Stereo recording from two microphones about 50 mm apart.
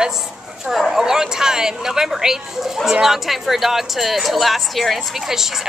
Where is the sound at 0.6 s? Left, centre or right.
Centre.